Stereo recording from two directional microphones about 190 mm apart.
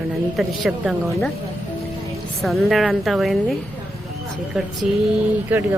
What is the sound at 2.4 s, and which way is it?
Speech, centre (ahead or behind).